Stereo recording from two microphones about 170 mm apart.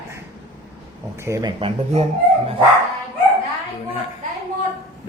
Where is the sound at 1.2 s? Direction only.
20° right (ahead or behind); by 2.0 s 35° right (ahead or behind).